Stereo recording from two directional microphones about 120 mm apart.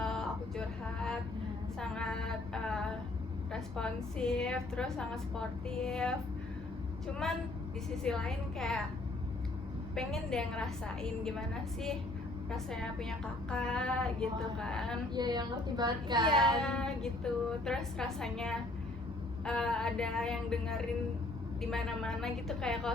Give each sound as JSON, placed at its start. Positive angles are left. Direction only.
{"t": 0.0, "sound": "music", "side_deg": 5}
{"t": 1.8, "sound": "a sound", "side_deg": 5}
{"t": 3.5, "sound": "a woman's voice", "side_deg": 5}
{"t": 9.9, "sound": "a woman's voice", "side_deg": 5}
{"t": 15.1, "sound": "a woman's voice", "side_deg": -35}
{"t": 16.6, "sound": "a woman's voice", "side_deg": 5}